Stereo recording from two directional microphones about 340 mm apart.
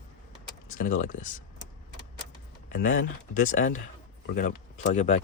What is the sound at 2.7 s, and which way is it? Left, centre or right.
Speech, left.